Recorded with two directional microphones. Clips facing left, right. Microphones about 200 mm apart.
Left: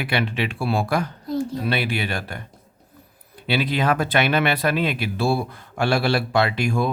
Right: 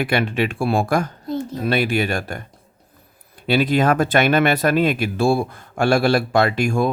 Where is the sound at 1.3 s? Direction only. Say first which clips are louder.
Even; 20° right (ahead or behind).